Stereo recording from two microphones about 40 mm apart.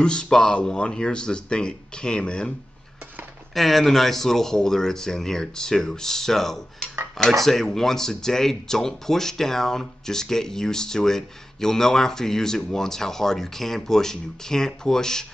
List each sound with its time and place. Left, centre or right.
0.0 s speech: left
3.5 s speech: centre